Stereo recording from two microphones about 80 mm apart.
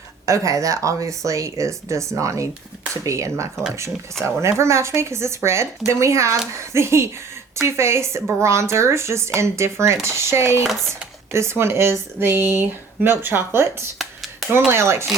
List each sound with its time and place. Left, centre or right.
0.3 s speech: right